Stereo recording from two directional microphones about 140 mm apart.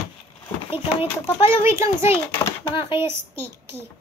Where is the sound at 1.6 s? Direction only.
20° right (ahead or behind).